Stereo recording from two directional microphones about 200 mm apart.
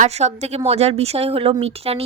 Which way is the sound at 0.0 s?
35° right (ahead or behind).